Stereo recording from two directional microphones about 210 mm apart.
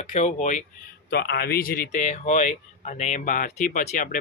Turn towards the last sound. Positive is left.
turn(degrees=40)  # may be behind; listen again after turning